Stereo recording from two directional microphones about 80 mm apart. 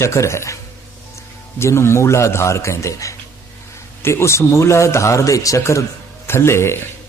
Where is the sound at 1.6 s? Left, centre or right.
Left.